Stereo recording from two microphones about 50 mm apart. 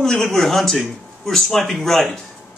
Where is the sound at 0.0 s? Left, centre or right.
Centre.